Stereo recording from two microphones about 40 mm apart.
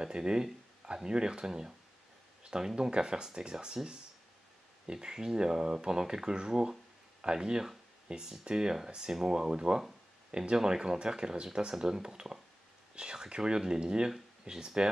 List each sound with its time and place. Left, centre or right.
0.0 s speech: centre
6.7 s a sound: centre
8.1 s speech: centre